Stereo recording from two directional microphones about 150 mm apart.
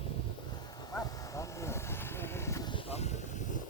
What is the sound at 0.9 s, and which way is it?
Vehicle, 20° left (ahead or behind).